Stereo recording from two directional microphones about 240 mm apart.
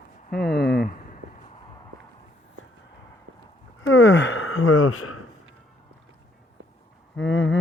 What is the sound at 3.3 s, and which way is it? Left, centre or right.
Clip-clop, right.